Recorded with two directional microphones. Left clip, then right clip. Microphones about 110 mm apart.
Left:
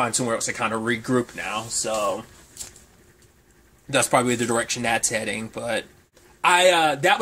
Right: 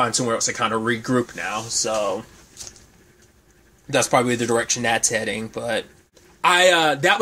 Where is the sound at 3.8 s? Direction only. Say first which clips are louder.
Right 2 dB; 15° right (ahead or behind); by 7.2 s 35° right (ahead or behind).